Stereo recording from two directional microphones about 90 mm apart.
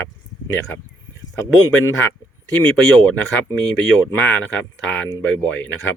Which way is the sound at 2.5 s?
15° left (ahead or behind).